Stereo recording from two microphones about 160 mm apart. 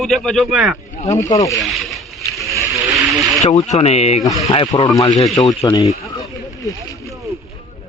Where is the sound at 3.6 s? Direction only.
45° left (ahead or behind).